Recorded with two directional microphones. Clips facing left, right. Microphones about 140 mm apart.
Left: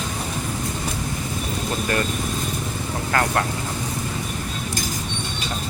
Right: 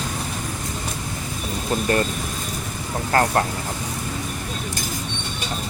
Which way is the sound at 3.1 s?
30° right (ahead or behind).